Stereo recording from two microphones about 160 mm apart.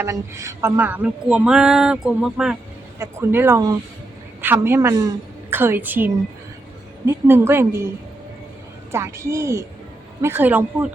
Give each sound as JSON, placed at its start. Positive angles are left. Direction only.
{"t": 0.0, "sound": "speech", "side_deg": -20}
{"t": 3.0, "sound": "a woman's voice", "side_deg": -15}
{"t": 8.9, "sound": "a woman's voice", "side_deg": -15}